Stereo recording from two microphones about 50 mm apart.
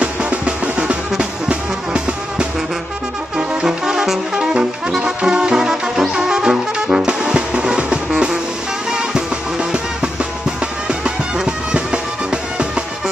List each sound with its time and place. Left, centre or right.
0.0 s drum: right
1.5 s music: right
3.3 s brass instrument: centre
8.9 s music: centre
10.9 s music: centre